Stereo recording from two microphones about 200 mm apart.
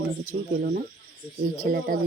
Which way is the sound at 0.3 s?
50° right (ahead or behind).